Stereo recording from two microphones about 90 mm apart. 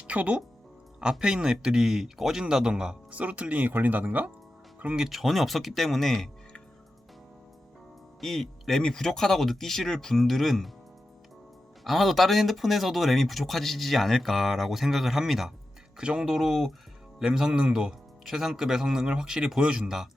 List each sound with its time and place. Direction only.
0.1 s speech: 15° right (ahead or behind)
5.0 s speech: centre (ahead or behind)
8.2 s speech: 5° left (ahead or behind)
11.9 s speech: centre (ahead or behind)